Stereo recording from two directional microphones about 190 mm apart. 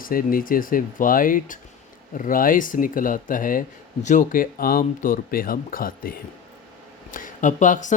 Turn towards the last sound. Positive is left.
turn(degrees=40)  # may be behind; listen again after turning